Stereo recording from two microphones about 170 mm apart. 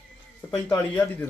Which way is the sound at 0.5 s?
15° left (ahead or behind).